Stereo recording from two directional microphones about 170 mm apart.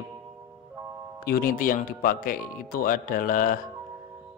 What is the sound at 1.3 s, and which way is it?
Speech, 60° left (ahead or behind).